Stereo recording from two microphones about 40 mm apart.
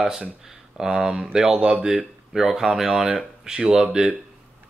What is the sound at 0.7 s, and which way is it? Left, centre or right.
Speech, centre.